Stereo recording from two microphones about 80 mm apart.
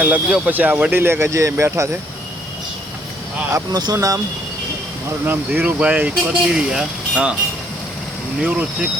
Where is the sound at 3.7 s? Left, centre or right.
Right.